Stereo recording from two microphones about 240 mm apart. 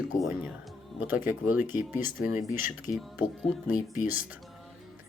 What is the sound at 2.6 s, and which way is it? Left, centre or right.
Speech, centre.